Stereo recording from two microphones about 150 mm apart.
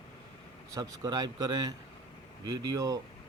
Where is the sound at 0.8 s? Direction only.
25° right (ahead or behind).